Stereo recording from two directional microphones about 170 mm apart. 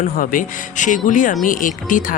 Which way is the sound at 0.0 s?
55° left (ahead or behind).